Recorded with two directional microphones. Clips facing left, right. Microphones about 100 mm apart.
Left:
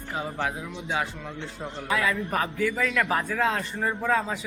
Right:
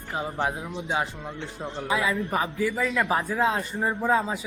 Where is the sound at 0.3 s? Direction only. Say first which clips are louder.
Right 2 dB; 30° right (ahead or behind).